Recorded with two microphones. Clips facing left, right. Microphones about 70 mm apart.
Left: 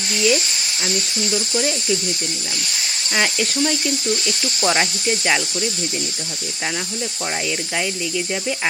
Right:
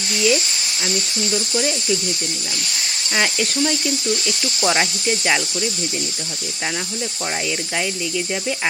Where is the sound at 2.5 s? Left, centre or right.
Left.